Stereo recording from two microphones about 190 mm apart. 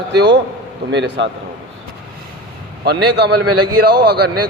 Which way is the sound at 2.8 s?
60° right (ahead or behind).